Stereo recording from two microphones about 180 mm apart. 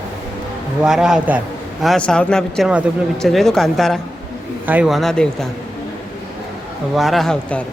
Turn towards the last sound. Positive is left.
turn(degrees=5)  # may be behind; listen again after turning